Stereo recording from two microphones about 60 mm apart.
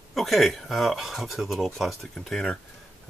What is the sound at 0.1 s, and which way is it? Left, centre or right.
Speech, centre.